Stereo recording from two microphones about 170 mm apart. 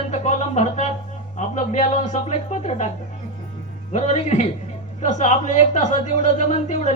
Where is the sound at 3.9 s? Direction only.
45° left (ahead or behind).